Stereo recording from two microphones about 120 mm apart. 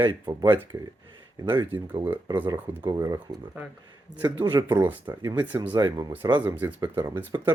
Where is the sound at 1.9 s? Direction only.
20° right (ahead or behind).